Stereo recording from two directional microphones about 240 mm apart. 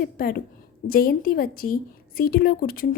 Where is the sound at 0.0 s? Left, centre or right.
Left.